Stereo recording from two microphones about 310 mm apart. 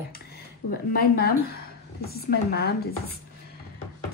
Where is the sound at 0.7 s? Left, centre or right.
Left.